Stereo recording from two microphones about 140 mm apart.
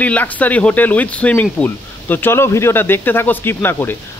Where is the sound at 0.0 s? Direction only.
10° left (ahead or behind).